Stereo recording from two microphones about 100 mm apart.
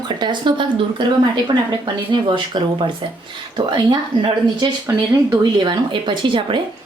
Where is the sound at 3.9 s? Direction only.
45° right (ahead or behind).